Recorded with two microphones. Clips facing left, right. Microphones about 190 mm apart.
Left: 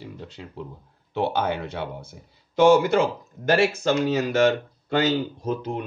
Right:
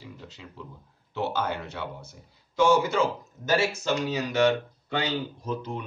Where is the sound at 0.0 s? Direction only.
55° left (ahead or behind).